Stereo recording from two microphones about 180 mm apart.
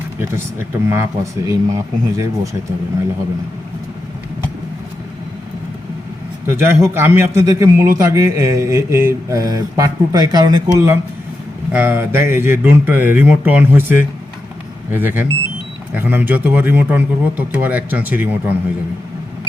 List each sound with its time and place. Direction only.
0.9 s speech: 15° right (ahead or behind)
6.5 s speech: 15° right (ahead or behind)
14.9 s speech: 10° right (ahead or behind)